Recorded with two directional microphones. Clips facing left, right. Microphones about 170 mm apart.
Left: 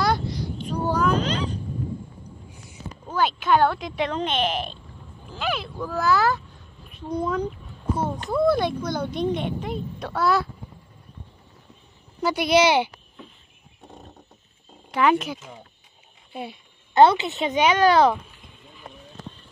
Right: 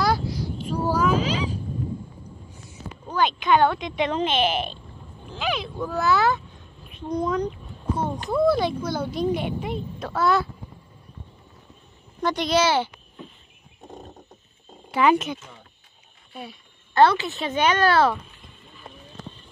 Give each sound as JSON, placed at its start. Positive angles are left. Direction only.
{"t": 0.0, "sound": "a sound", "side_deg": -5}
{"t": 3.1, "sound": "speech", "side_deg": 5}
{"t": 12.2, "sound": "speech", "side_deg": 10}
{"t": 14.9, "sound": "speech", "side_deg": 0}
{"t": 16.3, "sound": "speech", "side_deg": 25}